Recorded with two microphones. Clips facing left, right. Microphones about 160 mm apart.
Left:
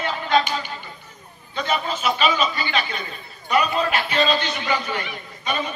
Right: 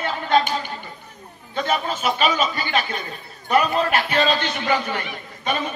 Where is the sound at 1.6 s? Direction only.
50° right (ahead or behind).